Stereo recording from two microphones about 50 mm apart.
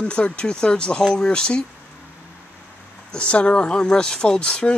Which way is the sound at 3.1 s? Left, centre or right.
Left.